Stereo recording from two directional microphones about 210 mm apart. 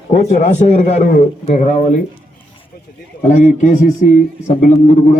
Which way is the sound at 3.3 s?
35° left (ahead or behind).